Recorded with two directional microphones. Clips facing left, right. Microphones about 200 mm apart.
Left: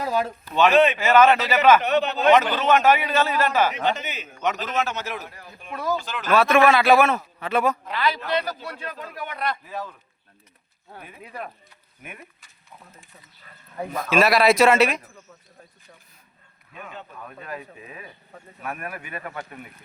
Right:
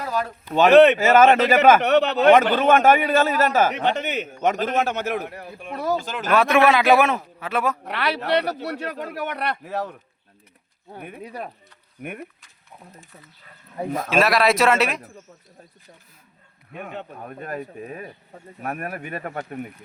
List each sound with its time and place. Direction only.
0.0 s a sound: 25° left (ahead or behind)
0.9 s a man's voice: 45° right (ahead or behind)
1.8 s a man's voice: 70° right (ahead or behind); by 3.7 s 45° right (ahead or behind)
3.8 s a man's voice: 65° right (ahead or behind)
4.3 s a man's voice: 45° right (ahead or behind); by 5.7 s 65° right (ahead or behind)
5.7 s speech: 35° right (ahead or behind)
6.0 s a man's voice: 45° right (ahead or behind)
6.3 s a man's voice: 15° right (ahead or behind)
7.3 s a man's voice: 5° right (ahead or behind)
7.9 s a man's voice: 70° right (ahead or behind)
11.2 s speech: 35° right (ahead or behind)
14.1 s speech: centre (ahead or behind)
16.7 s a man's voice: 60° right (ahead or behind)
17.2 s a man's voice: 45° right (ahead or behind)